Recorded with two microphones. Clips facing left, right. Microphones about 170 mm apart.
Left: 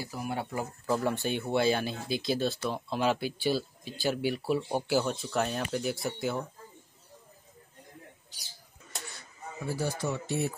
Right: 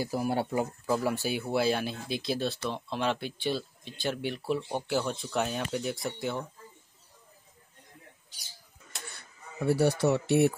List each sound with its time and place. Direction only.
0.0 s speech: 40° right (ahead or behind)
0.8 s speech: 5° right (ahead or behind)
9.7 s speech: 70° right (ahead or behind)